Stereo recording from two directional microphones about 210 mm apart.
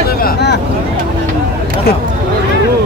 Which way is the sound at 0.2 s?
50° left (ahead or behind).